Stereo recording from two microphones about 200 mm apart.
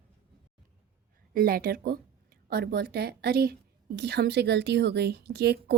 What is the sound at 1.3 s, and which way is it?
A woman's voice, 50° right (ahead or behind).